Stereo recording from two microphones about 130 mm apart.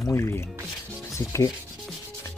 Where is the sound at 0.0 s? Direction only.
20° left (ahead or behind).